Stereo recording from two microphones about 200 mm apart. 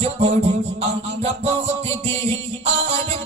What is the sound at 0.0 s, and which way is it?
Music, 30° right (ahead or behind).